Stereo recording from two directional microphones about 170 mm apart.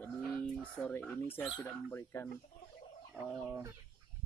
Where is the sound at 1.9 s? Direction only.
15° left (ahead or behind).